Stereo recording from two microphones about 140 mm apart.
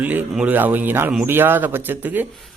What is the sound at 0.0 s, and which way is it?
Speech, 10° right (ahead or behind).